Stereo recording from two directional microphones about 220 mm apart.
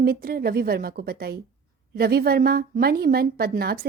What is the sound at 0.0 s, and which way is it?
A woman's voice, 45° right (ahead or behind).